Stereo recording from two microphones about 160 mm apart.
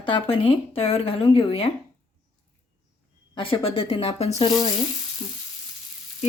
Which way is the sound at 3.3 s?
35° left (ahead or behind).